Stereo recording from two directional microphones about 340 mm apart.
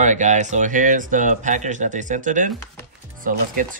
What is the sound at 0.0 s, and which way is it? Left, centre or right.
Speech, right.